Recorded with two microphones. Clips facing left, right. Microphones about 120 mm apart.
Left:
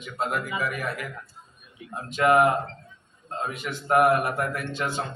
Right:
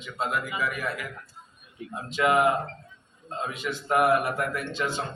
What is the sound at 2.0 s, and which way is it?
Speech, 50° left (ahead or behind).